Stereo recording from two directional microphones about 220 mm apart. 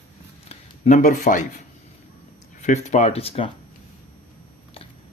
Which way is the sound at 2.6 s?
30° left (ahead or behind).